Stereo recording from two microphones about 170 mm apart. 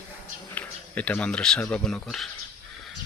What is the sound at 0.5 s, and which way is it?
Speech, 10° left (ahead or behind).